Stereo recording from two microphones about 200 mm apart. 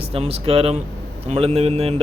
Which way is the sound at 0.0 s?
30° right (ahead or behind).